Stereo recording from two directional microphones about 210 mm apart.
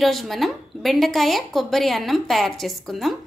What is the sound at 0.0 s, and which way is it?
A woman's voice, centre (ahead or behind).